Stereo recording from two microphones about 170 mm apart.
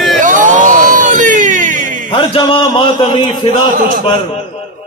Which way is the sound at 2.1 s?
30° left (ahead or behind).